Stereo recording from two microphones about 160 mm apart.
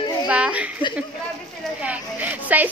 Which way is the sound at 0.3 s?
10° right (ahead or behind).